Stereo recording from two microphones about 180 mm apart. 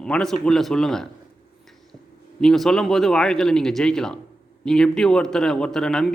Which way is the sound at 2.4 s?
Centre (ahead or behind).